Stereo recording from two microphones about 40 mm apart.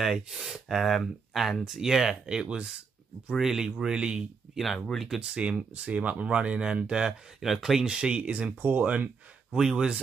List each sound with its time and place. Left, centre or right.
0.0 s speech: centre; by 4.2 s right
4.6 s speech: centre
5.2 s speech: right
7.4 s speech: centre
7.8 s speech: right
8.5 s speech: right
9.6 s speech: centre